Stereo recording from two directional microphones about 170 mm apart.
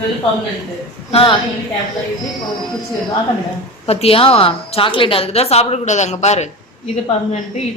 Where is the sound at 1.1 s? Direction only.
30° left (ahead or behind).